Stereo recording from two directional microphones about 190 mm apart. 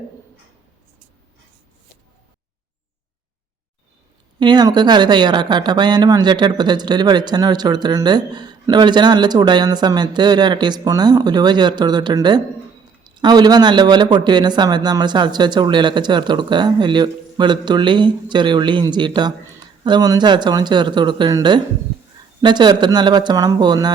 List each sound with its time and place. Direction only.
4.4 s speech: 20° right (ahead or behind)